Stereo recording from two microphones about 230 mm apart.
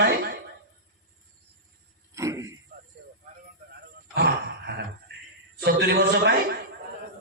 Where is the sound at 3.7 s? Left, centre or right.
Right.